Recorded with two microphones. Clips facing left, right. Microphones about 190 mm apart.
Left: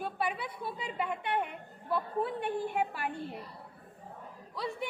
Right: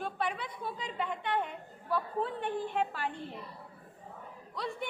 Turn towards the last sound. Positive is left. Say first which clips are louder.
# left 1 dB
turn(degrees=5)  # may be behind; listen again after turning